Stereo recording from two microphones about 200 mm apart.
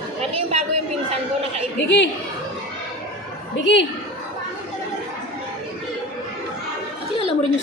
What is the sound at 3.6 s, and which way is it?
Speech, 65° left (ahead or behind).